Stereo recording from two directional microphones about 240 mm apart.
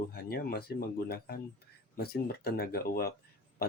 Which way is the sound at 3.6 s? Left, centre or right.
Left.